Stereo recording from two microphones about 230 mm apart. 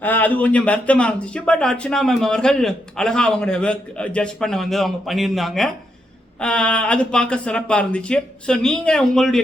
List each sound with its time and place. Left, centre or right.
0.0 s speech: centre